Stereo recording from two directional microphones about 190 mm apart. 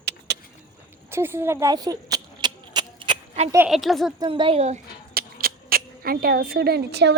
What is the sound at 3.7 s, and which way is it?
Speech, centre (ahead or behind).